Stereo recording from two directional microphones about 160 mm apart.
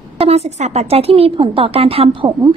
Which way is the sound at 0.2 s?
40° right (ahead or behind).